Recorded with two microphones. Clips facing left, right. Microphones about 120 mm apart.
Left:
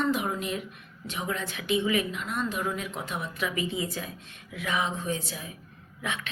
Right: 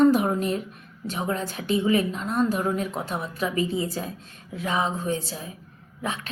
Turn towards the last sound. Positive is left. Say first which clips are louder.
# right 3 dB
turn(degrees=-35)  # may be behind; listen again after turning